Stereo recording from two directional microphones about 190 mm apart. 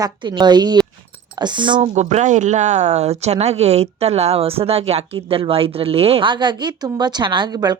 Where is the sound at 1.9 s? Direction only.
35° right (ahead or behind).